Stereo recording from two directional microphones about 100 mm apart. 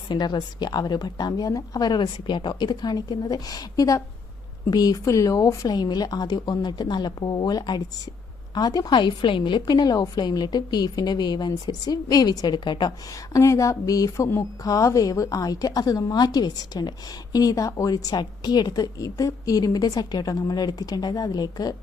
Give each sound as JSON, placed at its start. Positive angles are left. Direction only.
{"t": 0.1, "sound": "a woman's voice", "side_deg": 45}
{"t": 13.3, "sound": "a woman's voice", "side_deg": 30}